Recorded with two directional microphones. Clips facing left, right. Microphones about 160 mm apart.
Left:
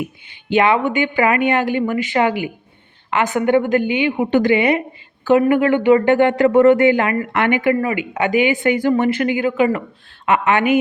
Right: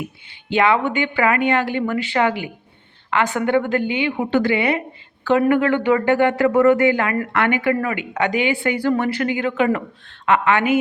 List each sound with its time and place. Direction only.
0.5 s a woman's voice: 15° left (ahead or behind)